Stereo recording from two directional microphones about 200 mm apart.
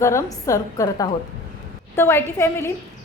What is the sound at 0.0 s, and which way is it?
A woman's voice, 15° left (ahead or behind).